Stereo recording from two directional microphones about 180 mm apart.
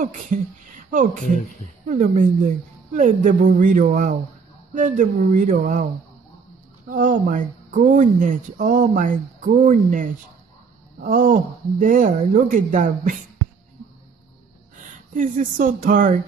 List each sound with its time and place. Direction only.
0.0 s a woman's voice: 45° right (ahead or behind)
6.9 s a woman's voice: 45° right (ahead or behind)
15.1 s a woman's voice: 45° right (ahead or behind)